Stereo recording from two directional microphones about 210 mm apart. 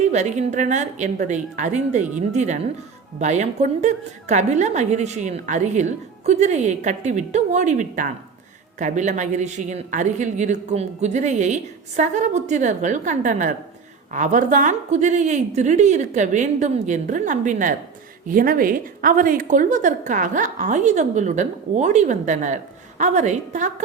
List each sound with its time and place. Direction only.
0.0 s a woman's voice: 35° right (ahead or behind)